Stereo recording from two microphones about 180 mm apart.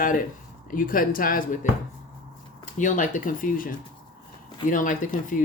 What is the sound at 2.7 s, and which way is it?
Speech, 45° left (ahead or behind).